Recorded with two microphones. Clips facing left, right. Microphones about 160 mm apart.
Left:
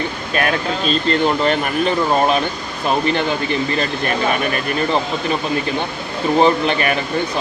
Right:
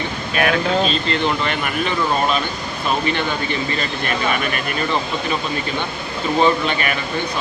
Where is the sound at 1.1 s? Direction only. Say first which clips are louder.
Left 4 dB; 40° left (ahead or behind).